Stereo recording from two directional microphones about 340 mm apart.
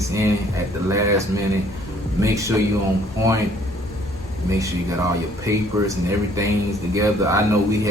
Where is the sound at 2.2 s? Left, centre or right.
Centre.